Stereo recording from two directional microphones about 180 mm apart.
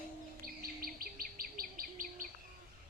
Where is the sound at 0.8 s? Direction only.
55° right (ahead or behind).